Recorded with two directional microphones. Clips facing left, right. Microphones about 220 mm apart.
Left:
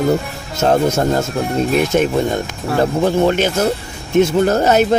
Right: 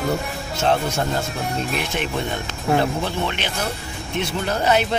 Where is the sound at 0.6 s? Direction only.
40° left (ahead or behind).